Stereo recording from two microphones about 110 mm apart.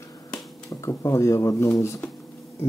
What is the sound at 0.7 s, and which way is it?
Speech, 30° left (ahead or behind).